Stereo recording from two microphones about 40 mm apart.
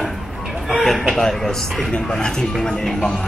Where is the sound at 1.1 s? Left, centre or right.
Centre.